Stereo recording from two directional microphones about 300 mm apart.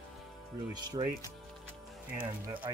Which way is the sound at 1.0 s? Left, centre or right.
Centre.